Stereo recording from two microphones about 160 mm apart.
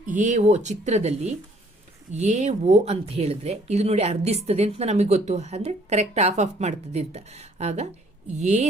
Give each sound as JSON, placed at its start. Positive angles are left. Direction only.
{"t": 0.0, "sound": "a woman's voice", "side_deg": -50}